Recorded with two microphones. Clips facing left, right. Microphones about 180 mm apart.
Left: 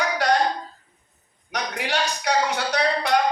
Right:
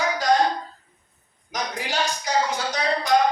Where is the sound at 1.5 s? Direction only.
65° left (ahead or behind).